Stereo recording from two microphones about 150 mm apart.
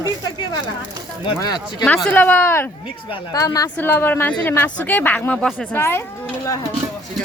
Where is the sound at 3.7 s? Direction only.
15° left (ahead or behind).